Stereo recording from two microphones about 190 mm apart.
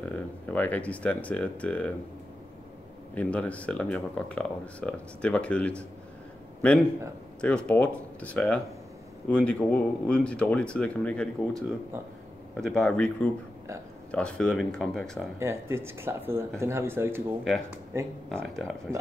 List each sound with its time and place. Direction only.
0.0 s speech: 10° left (ahead or behind)
3.2 s speech: 5° left (ahead or behind)
15.3 s speech: 15° right (ahead or behind)
18.3 s speech: centre (ahead or behind)